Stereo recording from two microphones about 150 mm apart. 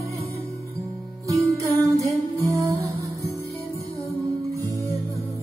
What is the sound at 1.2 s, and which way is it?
Music, 20° right (ahead or behind).